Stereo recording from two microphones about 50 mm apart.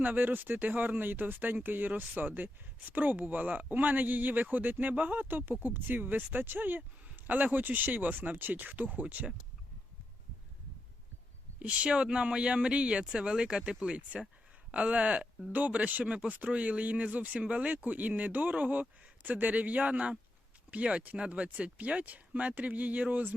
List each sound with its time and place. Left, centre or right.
0.0 s speech: right
11.6 s speech: right